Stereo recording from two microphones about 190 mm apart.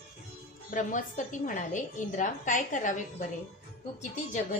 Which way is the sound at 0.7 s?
45° left (ahead or behind).